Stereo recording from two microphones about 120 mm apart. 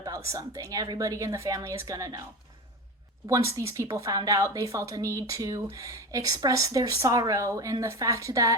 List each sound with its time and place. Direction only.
0.3 s speech: 30° right (ahead or behind)
3.2 s speech: 25° right (ahead or behind)